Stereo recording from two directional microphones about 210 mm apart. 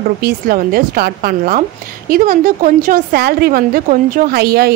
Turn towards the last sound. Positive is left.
turn(degrees=-50)  # may be behind; listen again after turning